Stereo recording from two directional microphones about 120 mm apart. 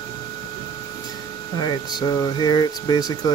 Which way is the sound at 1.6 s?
35° left (ahead or behind).